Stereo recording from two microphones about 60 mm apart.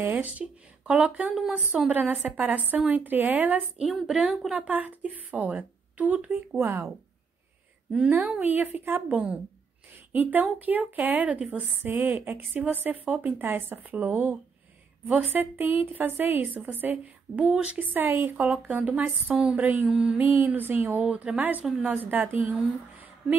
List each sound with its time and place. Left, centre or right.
0.0 s a woman's voice: right
4.1 s mantra: centre
4.6 s a woman's voice: right
6.6 s speech: right
8.1 s a woman's voice: right
17.7 s a woman's voice: right
19.9 s mantra: centre
20.2 s a woman's voice: right
21.0 s a woman's voice: right